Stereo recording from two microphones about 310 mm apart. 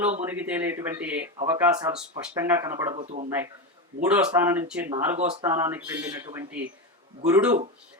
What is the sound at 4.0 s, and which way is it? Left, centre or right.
Speech, centre.